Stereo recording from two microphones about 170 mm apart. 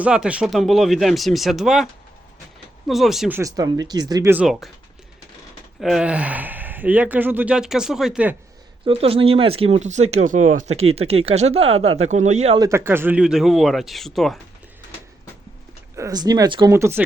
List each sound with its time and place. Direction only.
0.0 s speech: 5° right (ahead or behind)
3.3 s speech: 20° right (ahead or behind)
4.4 s speech: centre (ahead or behind)
5.8 s speech: 5° right (ahead or behind)
8.8 s speech: 35° right (ahead or behind)
12.5 s speech: 15° right (ahead or behind); by 14.3 s centre (ahead or behind)
16.0 s speech: 20° right (ahead or behind)